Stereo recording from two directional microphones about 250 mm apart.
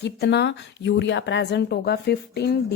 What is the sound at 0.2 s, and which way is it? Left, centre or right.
Speech, left.